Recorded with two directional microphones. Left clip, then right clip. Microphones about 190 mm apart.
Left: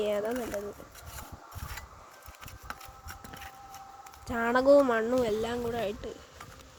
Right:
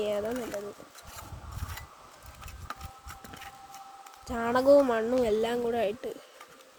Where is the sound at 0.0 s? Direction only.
5° left (ahead or behind).